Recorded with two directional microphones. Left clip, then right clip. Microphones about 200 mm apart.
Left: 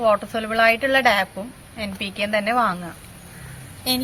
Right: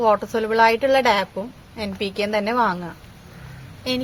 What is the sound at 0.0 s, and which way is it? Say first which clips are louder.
A woman's voice: right 1 dB; 60° right (ahead or behind).